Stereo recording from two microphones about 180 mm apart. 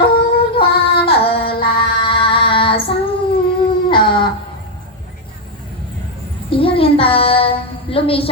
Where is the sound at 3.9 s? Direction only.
25° left (ahead or behind).